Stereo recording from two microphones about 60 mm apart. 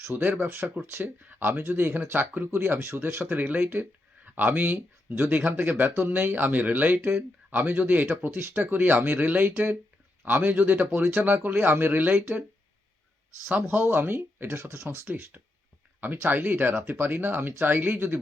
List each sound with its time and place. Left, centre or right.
0.2 s speech: right
13.5 s speech: right